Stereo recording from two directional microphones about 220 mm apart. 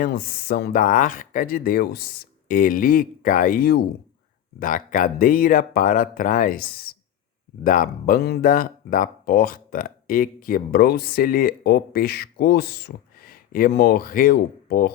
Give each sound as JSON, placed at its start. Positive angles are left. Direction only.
{"t": 0.0, "sound": "speech", "side_deg": 45}